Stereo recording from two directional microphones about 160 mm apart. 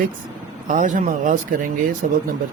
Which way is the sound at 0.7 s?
55° right (ahead or behind).